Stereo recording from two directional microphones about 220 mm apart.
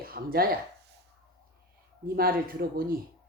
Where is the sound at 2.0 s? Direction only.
40° right (ahead or behind).